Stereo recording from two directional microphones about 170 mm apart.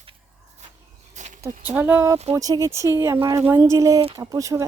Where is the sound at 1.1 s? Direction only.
45° right (ahead or behind).